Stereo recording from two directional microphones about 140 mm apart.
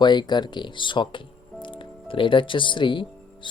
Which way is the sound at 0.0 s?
30° left (ahead or behind).